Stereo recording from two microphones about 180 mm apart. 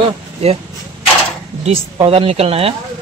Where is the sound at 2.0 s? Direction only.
30° right (ahead or behind).